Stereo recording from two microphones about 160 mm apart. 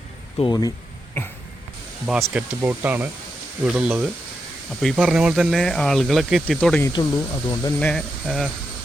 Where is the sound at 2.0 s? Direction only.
5° right (ahead or behind).